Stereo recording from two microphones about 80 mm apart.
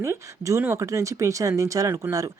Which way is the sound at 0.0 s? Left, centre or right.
Right.